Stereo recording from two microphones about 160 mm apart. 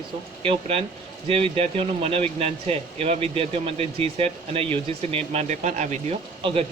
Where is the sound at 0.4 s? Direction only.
35° right (ahead or behind).